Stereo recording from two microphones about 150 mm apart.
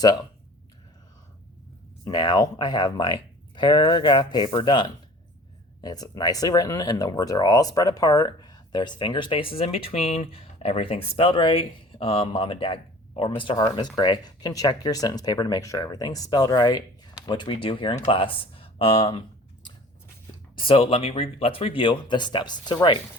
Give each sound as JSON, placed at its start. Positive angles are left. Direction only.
{"t": 0.0, "sound": "speech", "side_deg": 25}
{"t": 2.0, "sound": "speech", "side_deg": 25}
{"t": 20.6, "sound": "speech", "side_deg": 40}